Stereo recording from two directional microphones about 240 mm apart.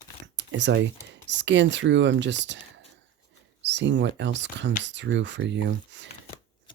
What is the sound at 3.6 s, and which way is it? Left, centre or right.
Speech, right.